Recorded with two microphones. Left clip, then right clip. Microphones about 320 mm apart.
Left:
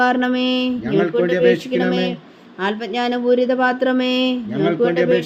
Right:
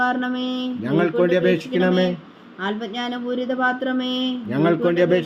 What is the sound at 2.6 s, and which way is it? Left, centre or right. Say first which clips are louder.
Speech: left 5 dB; left.